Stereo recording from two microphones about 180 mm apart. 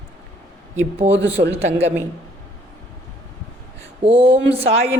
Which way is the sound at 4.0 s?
30° right (ahead or behind).